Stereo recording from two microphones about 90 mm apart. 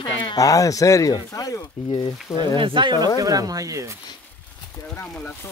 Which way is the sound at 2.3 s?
65° right (ahead or behind).